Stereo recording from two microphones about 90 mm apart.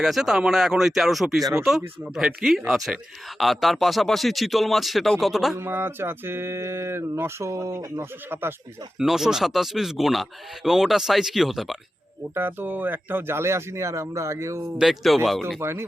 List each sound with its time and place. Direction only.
0.0 s speech: 5° right (ahead or behind)
5.5 s speech: 25° right (ahead or behind)
7.5 s speech: 40° right (ahead or behind)
8.3 s speech: 25° right (ahead or behind)
9.0 s speech: 5° right (ahead or behind)
12.3 s speech: 25° right (ahead or behind)
14.8 s speech: centre (ahead or behind)